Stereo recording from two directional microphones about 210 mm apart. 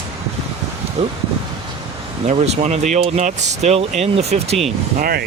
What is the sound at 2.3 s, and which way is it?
Speech, 30° right (ahead or behind).